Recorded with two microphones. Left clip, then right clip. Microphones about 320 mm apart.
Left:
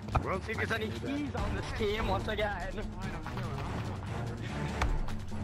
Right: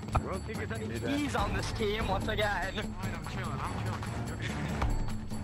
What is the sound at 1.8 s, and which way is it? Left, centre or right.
Speech, centre.